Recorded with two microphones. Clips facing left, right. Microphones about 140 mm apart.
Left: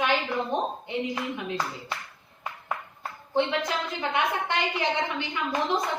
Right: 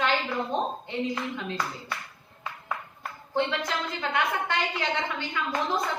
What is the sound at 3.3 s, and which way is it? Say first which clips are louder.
A woman's voice: left 2 dB; 20° left (ahead or behind).